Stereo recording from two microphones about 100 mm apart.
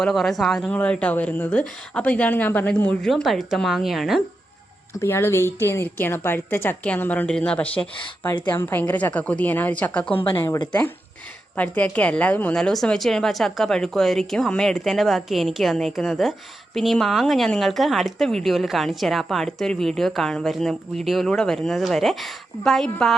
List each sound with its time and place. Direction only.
0.0 s speech: centre (ahead or behind)
3.1 s speech: centre (ahead or behind)
4.9 s a woman's voice: 25° left (ahead or behind)
10.3 s a woman's voice: 25° left (ahead or behind); by 23.1 s 5° left (ahead or behind)